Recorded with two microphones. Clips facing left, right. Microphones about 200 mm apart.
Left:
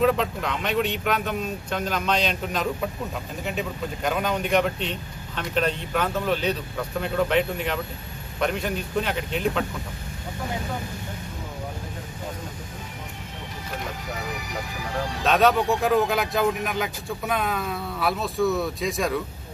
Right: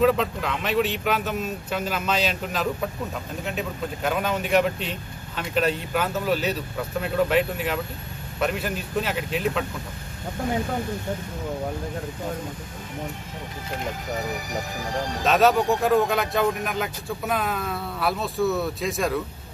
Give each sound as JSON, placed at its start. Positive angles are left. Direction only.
{"t": 0.0, "sound": "speech", "side_deg": 0}
{"t": 14.1, "sound": "speech", "side_deg": -45}
{"t": 15.2, "sound": "speech", "side_deg": -5}